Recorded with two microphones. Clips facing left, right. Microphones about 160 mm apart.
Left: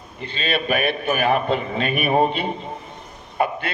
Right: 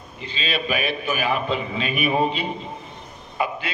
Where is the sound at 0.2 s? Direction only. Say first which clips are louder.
Left 3 dB; 55° left (ahead or behind).